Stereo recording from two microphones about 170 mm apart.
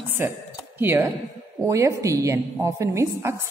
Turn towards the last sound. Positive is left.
turn(degrees=-15)  # may be behind; listen again after turning